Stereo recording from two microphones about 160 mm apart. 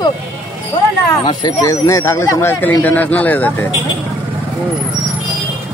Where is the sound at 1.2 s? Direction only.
25° left (ahead or behind).